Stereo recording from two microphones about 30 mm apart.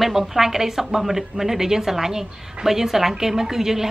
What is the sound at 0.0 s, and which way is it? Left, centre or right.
A woman's voice, centre.